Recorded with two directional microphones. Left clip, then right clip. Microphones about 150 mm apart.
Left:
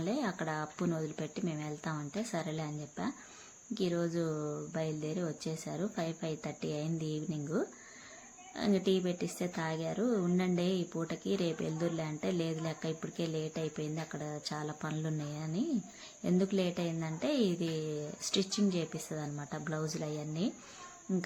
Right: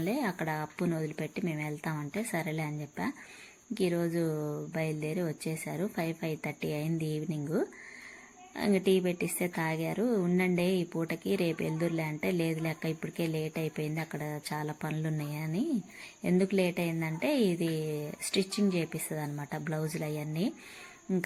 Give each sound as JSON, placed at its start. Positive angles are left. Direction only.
{"t": 0.0, "sound": "a woman's voice", "side_deg": -15}